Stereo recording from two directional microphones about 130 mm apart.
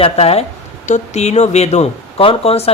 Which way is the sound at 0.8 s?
65° left (ahead or behind).